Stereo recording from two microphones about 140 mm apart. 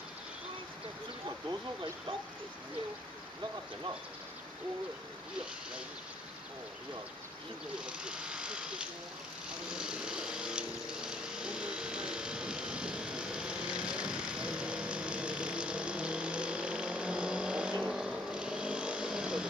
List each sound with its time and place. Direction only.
1.5 s speech: 35° right (ahead or behind)
7.8 s speech: 5° right (ahead or behind)
9.7 s vehicle: 5° right (ahead or behind)